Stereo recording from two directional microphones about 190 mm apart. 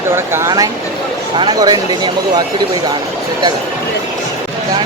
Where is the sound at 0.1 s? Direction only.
10° right (ahead or behind).